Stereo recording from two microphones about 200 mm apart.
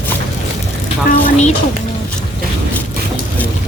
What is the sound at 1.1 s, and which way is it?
Speech, 35° left (ahead or behind).